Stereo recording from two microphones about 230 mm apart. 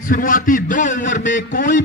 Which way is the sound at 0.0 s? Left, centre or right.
Left.